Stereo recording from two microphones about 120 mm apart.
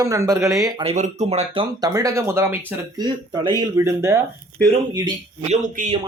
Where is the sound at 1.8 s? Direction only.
30° right (ahead or behind).